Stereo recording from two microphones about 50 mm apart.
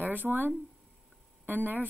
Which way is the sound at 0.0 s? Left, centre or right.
Right.